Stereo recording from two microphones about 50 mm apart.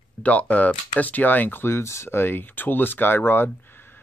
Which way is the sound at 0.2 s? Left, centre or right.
Left.